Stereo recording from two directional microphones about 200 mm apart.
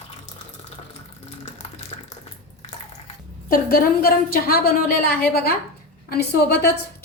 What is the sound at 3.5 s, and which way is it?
A woman's voice, 45° left (ahead or behind).